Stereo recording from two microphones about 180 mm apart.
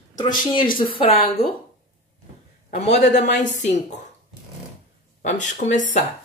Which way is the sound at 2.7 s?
40° left (ahead or behind).